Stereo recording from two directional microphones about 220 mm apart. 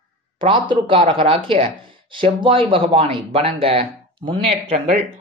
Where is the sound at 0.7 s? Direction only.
25° right (ahead or behind).